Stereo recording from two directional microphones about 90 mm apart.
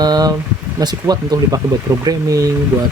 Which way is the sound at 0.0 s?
45° right (ahead or behind).